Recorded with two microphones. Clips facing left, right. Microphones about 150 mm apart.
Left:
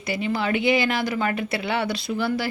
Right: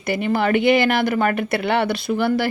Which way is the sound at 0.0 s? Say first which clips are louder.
Right 5 dB; 55° right (ahead or behind).